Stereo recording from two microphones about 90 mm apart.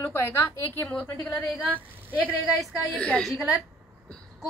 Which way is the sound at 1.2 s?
15° left (ahead or behind).